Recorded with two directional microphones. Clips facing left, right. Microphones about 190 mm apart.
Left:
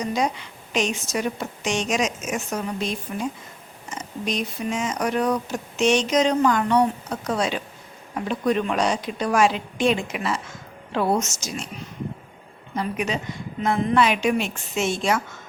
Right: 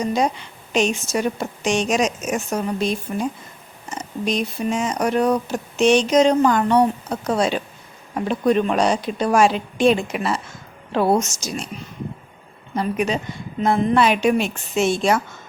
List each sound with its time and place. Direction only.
0.0 s speech: 30° right (ahead or behind)
12.7 s speech: 35° right (ahead or behind)